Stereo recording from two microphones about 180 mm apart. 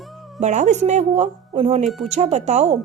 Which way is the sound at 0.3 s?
40° right (ahead or behind).